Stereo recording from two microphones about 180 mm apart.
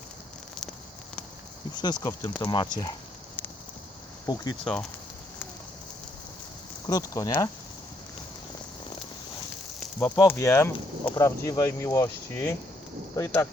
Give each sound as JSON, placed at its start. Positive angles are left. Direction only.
{"t": 1.7, "sound": "speech", "side_deg": 25}
{"t": 4.6, "sound": "speech", "side_deg": 5}
{"t": 6.8, "sound": "speech", "side_deg": 20}
{"t": 10.2, "sound": "speech", "side_deg": 15}